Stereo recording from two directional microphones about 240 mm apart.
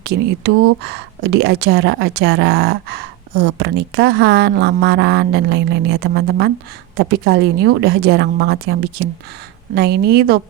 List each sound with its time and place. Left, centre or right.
0.0 s speech: right